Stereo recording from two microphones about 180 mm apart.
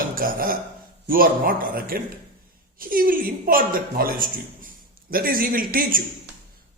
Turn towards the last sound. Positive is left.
turn(degrees=-50)  # may be behind; listen again after turning